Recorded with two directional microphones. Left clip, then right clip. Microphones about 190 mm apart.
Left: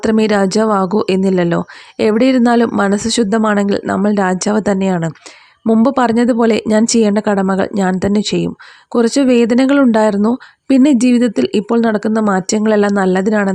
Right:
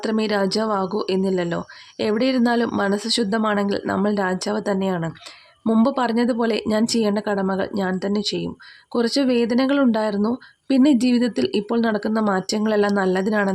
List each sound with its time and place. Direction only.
0.0 s speech: 35° left (ahead or behind)